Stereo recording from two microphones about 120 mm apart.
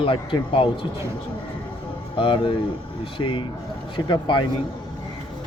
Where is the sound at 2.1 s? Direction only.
45° left (ahead or behind).